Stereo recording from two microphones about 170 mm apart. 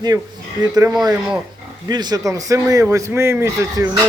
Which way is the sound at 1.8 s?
25° right (ahead or behind).